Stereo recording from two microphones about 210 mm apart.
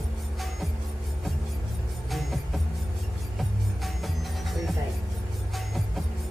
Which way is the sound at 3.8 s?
Centre (ahead or behind).